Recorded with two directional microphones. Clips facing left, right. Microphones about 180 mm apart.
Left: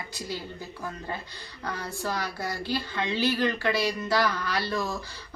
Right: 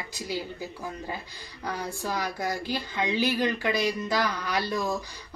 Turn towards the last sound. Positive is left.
turn(degrees=-15)  # may be behind; listen again after turning